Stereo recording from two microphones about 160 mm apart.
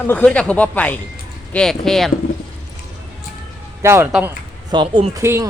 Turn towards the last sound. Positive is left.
turn(degrees=-15)  # may be behind; listen again after turning